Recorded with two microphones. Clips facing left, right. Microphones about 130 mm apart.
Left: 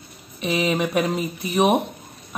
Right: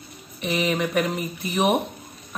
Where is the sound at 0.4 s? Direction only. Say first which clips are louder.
Left 2 dB; 15° left (ahead or behind).